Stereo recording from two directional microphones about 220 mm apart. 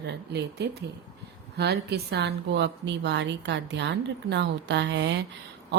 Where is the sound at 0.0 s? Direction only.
50° right (ahead or behind).